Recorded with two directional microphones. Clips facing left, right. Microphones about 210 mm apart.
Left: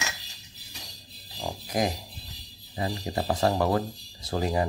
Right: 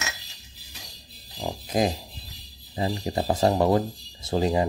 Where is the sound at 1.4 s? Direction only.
25° right (ahead or behind).